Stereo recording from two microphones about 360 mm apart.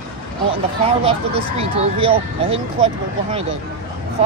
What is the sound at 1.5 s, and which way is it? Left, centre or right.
Speech, centre.